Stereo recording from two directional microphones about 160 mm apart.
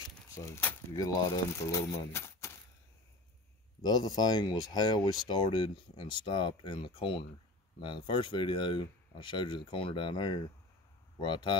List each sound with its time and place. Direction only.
0.3 s speech: 20° left (ahead or behind)
3.8 s speech: 25° left (ahead or behind)